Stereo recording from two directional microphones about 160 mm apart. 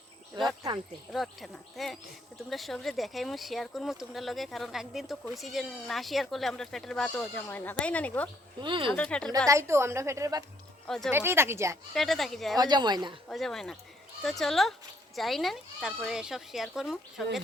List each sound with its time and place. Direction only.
0.4 s a woman's voice: 30° right (ahead or behind)
1.1 s speech: centre (ahead or behind)
8.6 s speech: 30° right (ahead or behind)
8.9 s a woman's voice: 5° left (ahead or behind)
9.5 s a woman's voice: 15° right (ahead or behind)
10.8 s speech: 5° left (ahead or behind)
11.1 s a woman's voice: 15° right (ahead or behind)
11.9 s speech: centre (ahead or behind)
12.5 s a woman's voice: 25° right (ahead or behind)
13.3 s speech: centre (ahead or behind)